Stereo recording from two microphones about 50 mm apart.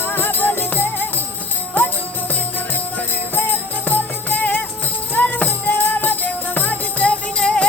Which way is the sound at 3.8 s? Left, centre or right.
Left.